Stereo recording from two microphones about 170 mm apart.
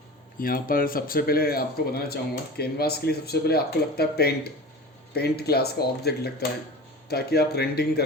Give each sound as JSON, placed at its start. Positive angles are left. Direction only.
{"t": 0.3, "sound": "speech", "side_deg": 55}